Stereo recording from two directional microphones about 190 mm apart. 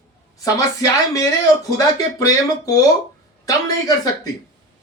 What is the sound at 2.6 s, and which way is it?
Speech, 20° left (ahead or behind).